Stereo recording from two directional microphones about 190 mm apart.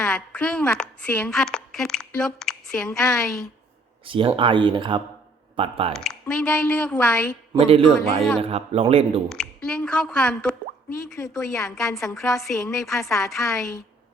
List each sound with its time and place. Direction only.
0.0 s a woman's voice: 5° left (ahead or behind)
4.0 s speech: 30° right (ahead or behind)
5.9 s a woman's voice: 5° left (ahead or behind)
7.6 s speech: 30° right (ahead or behind)
9.3 s speech: 5° left (ahead or behind)
11.2 s a woman's voice: 15° left (ahead or behind)
11.6 s speech: centre (ahead or behind)
13.6 s a woman's voice: 15° left (ahead or behind)